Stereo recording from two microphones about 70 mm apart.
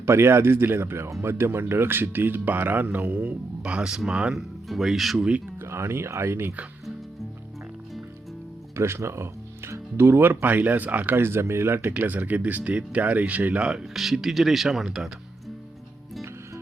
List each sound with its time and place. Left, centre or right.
0.0 s speech: right; by 5.2 s centre
5.6 s speech: right
8.7 s speech: right; by 15.1 s centre